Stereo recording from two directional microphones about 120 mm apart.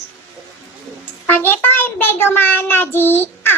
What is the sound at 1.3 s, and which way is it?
A child's voice, 15° left (ahead or behind).